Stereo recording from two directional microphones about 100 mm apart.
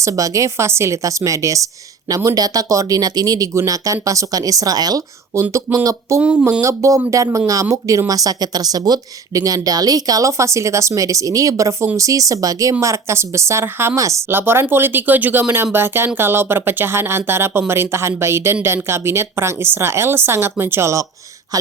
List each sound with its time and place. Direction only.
0.0 s speech: 35° right (ahead or behind)
5.3 s speech: 30° right (ahead or behind)